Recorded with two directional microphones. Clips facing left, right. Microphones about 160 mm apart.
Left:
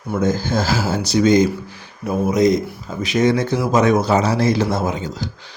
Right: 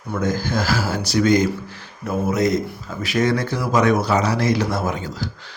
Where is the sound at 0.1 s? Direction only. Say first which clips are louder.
Left 3 dB; 25° left (ahead or behind).